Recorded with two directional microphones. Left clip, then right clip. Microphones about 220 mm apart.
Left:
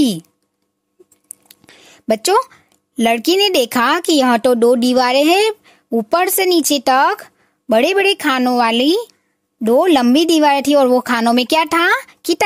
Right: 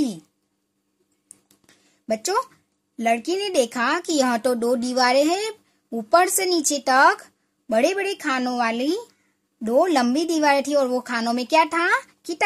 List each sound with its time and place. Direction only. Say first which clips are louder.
0.0 s speech: left 9 dB; 40° left (ahead or behind)
1.5 s speech: left 14 dB; 40° left (ahead or behind)